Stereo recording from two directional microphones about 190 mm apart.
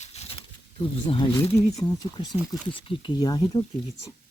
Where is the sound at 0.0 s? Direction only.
35° left (ahead or behind).